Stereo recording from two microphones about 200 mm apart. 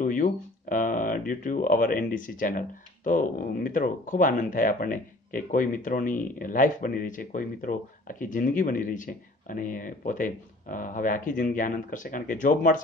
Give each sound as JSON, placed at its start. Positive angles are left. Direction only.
{"t": 0.0, "sound": "speech", "side_deg": 40}